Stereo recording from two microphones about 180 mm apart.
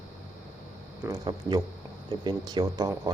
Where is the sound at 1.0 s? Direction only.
20° right (ahead or behind).